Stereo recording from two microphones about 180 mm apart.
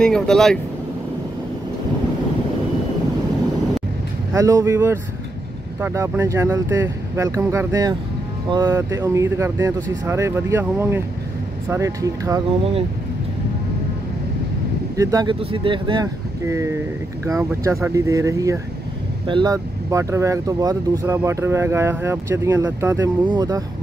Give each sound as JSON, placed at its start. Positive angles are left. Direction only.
{"t": 0.0, "sound": "speech", "side_deg": 5}
{"t": 4.3, "sound": "speech", "side_deg": -20}
{"t": 15.0, "sound": "speech", "side_deg": -20}